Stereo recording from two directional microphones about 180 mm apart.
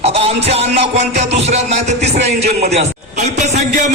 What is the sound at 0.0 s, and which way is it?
Music, 35° right (ahead or behind).